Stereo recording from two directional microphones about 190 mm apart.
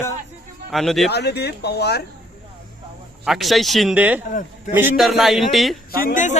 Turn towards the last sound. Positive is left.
turn(degrees=40)  # may be behind; listen again after turning